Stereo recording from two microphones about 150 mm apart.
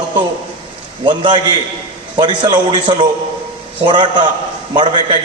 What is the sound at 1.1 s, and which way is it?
A man's voice, 30° right (ahead or behind).